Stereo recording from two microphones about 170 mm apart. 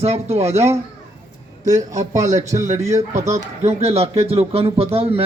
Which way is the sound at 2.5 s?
45° right (ahead or behind).